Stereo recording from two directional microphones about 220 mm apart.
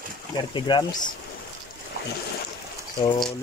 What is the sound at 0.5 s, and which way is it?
Speech, 20° left (ahead or behind).